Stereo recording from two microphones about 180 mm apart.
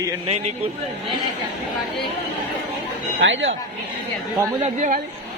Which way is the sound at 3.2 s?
90° right.